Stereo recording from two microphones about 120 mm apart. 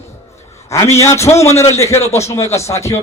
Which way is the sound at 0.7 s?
25° left (ahead or behind).